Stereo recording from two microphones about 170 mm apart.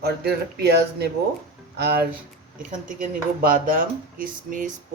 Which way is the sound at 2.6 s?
50° right (ahead or behind).